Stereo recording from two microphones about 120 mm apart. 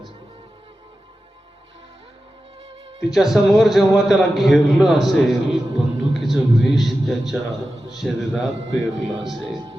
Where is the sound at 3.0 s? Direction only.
Centre (ahead or behind).